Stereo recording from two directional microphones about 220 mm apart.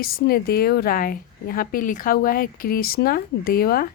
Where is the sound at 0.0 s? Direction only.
40° left (ahead or behind).